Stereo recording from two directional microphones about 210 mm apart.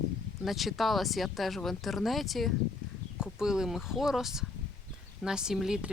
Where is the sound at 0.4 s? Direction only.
Centre (ahead or behind).